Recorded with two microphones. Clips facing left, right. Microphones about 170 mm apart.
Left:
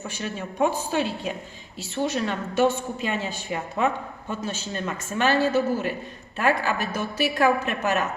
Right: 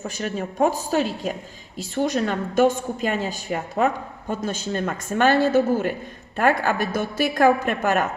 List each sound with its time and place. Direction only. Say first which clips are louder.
0.2 s a woman's voice: right 3 dB; 45° right (ahead or behind)